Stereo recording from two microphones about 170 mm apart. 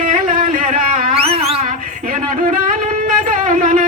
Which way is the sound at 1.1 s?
35° right (ahead or behind).